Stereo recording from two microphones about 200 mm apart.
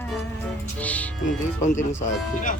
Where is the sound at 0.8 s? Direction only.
5° left (ahead or behind).